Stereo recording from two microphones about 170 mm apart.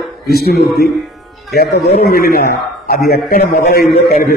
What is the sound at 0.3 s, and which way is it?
Speech, 65° left (ahead or behind).